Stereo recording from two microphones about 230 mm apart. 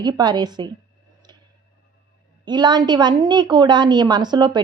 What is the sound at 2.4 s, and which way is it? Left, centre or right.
A woman's voice, centre.